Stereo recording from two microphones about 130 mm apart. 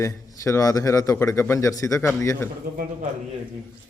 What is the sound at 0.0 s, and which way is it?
Speech, 20° left (ahead or behind).